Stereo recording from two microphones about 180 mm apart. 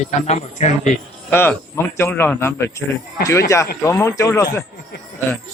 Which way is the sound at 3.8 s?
15° left (ahead or behind).